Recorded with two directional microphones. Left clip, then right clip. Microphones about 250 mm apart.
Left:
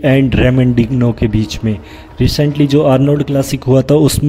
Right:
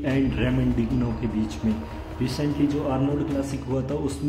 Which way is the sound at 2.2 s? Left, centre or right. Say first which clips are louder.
Left 11 dB; left.